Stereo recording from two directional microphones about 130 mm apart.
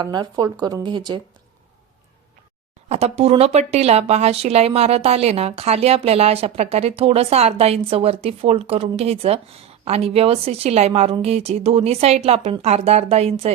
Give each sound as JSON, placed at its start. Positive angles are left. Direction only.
{"t": 0.0, "sound": "speech", "side_deg": -35}
{"t": 2.9, "sound": "speech", "side_deg": -50}